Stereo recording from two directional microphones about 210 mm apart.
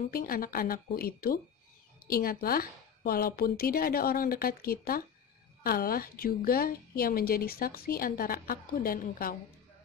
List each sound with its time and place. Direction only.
0.0 s a woman's voice: 45° left (ahead or behind)